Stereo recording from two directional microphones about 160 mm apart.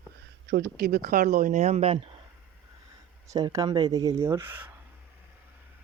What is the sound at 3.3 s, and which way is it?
Speech, 20° right (ahead or behind).